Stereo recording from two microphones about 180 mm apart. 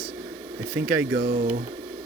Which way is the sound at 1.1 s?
65° right (ahead or behind).